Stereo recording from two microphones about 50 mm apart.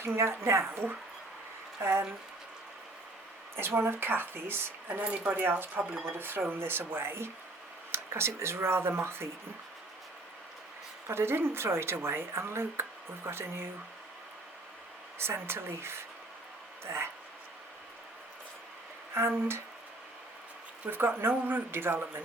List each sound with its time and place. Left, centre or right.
0.0 s speech: right
1.8 s speech: right
3.7 s speech: right
7.9 s speech: right
11.1 s speech: right
15.2 s speech: right
19.1 s speech: right
20.9 s speech: right